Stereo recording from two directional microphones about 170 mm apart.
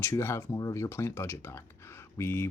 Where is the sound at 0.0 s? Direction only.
15° left (ahead or behind).